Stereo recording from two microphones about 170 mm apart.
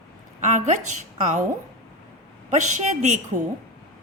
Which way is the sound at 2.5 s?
45° right (ahead or behind).